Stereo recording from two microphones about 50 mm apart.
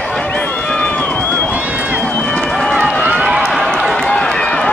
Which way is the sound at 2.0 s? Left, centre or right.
Left.